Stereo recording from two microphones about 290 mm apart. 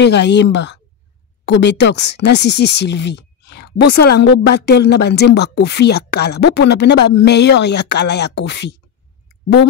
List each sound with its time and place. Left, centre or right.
0.0 s a woman's voice: left